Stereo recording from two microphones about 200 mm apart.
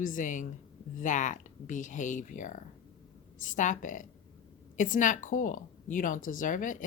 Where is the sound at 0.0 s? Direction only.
40° left (ahead or behind).